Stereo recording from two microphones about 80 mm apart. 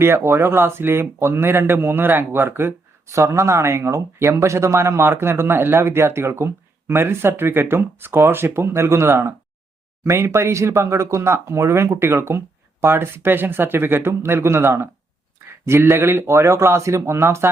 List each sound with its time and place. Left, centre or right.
0.0 s speech: right